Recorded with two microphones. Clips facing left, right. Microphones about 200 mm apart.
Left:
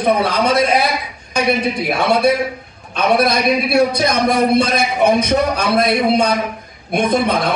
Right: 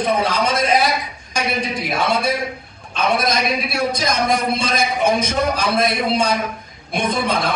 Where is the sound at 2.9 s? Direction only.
60° left (ahead or behind).